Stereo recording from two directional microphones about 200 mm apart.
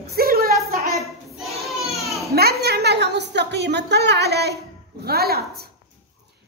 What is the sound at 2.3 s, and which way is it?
A child's voice, 50° right (ahead or behind).